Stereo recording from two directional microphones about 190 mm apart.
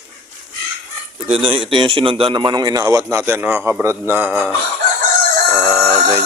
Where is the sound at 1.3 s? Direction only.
30° right (ahead or behind); by 4.5 s 10° right (ahead or behind).